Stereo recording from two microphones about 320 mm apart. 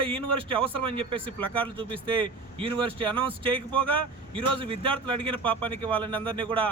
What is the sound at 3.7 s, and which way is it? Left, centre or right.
Speech, centre.